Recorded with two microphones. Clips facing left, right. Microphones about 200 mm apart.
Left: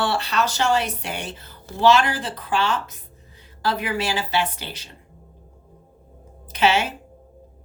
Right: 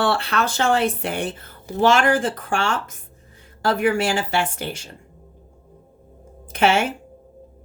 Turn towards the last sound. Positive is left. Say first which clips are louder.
# right 2 dB
turn(degrees=-50)  # may be behind; listen again after turning